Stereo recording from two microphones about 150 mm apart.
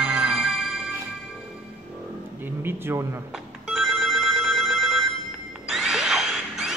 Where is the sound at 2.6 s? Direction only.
15° right (ahead or behind).